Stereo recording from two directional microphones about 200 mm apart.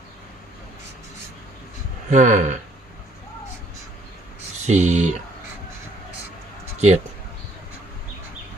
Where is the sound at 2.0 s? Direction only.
40° right (ahead or behind).